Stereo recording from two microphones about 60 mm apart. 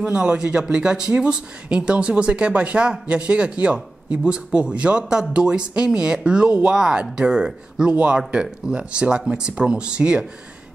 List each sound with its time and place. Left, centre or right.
0.0 s speech: centre
7.9 s speech: right